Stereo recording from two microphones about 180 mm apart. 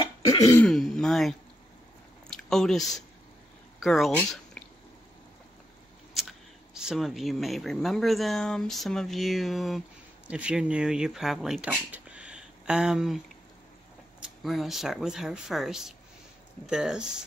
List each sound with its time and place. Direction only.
0.2 s throat clearing: 20° left (ahead or behind)
0.7 s speech: centre (ahead or behind)
2.2 s biting: 5° left (ahead or behind)
3.8 s speech: centre (ahead or behind)
6.7 s speech: 5° right (ahead or behind)
14.2 s speech: centre (ahead or behind)